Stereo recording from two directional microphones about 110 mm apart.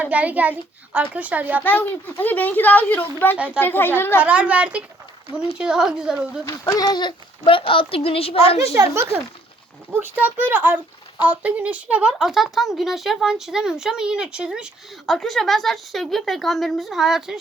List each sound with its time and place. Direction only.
0.0 s a child's voice: 15° right (ahead or behind)
1.6 s speech: 15° left (ahead or behind)
3.3 s a child's voice: 10° right (ahead or behind)
3.6 s a child's voice: 20° left (ahead or behind)
4.2 s a child's voice: 10° right (ahead or behind)
6.4 s speech: 35° left (ahead or behind); by 8.5 s 65° left (ahead or behind)
8.6 s a child's voice: 25° right (ahead or behind); by 15.1 s 10° right (ahead or behind)
15.1 s speech: 5° left (ahead or behind)